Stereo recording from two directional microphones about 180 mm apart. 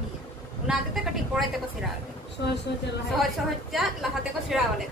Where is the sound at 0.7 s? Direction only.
5° right (ahead or behind).